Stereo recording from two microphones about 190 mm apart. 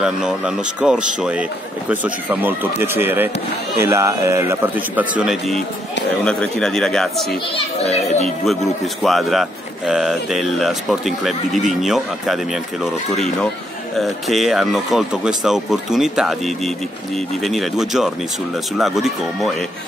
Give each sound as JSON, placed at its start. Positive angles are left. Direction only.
{"t": 0.0, "sound": "a man's voice", "side_deg": -5}
{"t": 7.5, "sound": "a child's voice", "side_deg": 35}
{"t": 9.0, "sound": "speech", "side_deg": 0}